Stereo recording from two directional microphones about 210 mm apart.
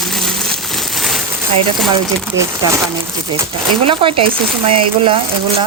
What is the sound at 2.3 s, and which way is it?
Speech, 65° right (ahead or behind).